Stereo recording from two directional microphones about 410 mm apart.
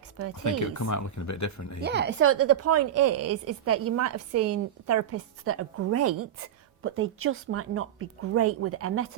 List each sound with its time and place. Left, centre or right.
0.4 s speech: left
1.8 s a woman's voice: right